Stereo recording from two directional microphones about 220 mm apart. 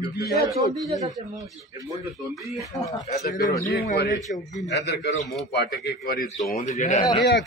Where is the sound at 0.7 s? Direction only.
15° right (ahead or behind).